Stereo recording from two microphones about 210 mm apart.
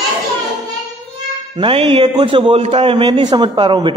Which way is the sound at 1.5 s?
25° right (ahead or behind).